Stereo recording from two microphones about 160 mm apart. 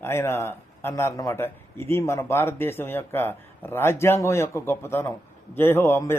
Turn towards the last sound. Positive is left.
turn(degrees=15)  # may be behind; listen again after turning